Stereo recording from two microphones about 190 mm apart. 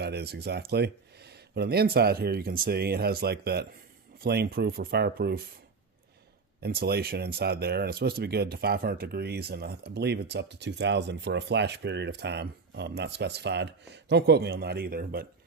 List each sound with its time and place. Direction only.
0.0 s speech: 60° right (ahead or behind)
6.6 s speech: 55° right (ahead or behind)